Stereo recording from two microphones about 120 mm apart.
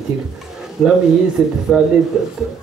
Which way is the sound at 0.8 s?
Centre (ahead or behind).